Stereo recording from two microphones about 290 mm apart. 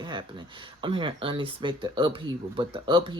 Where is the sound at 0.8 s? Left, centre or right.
Centre.